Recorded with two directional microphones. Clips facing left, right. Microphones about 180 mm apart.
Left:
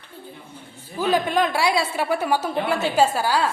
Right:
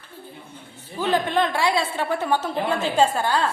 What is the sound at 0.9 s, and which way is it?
A woman's voice, 10° left (ahead or behind).